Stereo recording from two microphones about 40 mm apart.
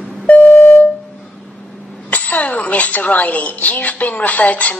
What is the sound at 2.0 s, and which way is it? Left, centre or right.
A woman's voice, left.